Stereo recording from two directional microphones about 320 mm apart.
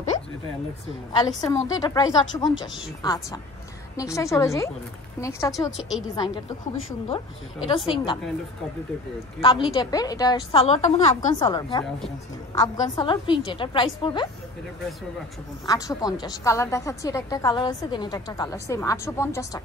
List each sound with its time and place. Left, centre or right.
0.1 s a sound: left
1.1 s a woman's voice: centre
6.1 s a woman's voice: centre
7.6 s a woman's voice: centre
9.4 s a woman's voice: centre
15.6 s a woman's voice: centre